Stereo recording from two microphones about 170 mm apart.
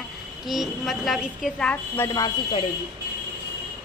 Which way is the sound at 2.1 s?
25° left (ahead or behind).